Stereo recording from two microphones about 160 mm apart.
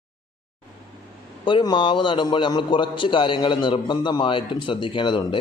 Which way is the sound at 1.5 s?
30° left (ahead or behind).